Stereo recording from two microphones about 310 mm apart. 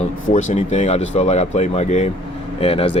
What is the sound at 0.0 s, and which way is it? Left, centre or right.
Speech, left.